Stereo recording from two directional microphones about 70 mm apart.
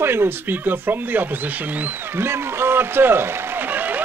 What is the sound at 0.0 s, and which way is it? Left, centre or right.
Speech, right.